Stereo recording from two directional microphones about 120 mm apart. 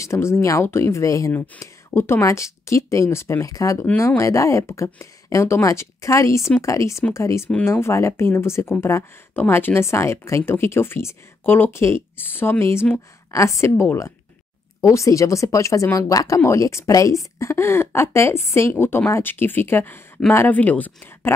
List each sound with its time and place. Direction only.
0.0 s speech: 25° left (ahead or behind)